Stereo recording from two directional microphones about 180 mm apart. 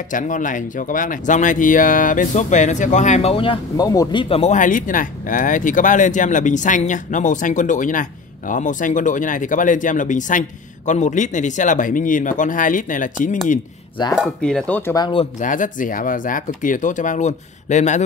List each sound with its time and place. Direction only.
0.1 s speech: 45° left (ahead or behind)
14.1 s speech: centre (ahead or behind)
15.0 s speech: 25° left (ahead or behind)
15.4 s speech: 45° left (ahead or behind)